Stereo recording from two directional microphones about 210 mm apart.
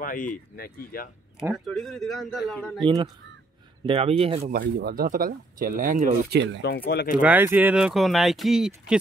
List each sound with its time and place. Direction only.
0.0 s speech: 40° left (ahead or behind)
1.4 s speech: centre (ahead or behind)
2.8 s speech: 20° right (ahead or behind)
4.5 s speech: 50° right (ahead or behind)
6.6 s speech: 50° left (ahead or behind)
7.2 s speech: 10° right (ahead or behind)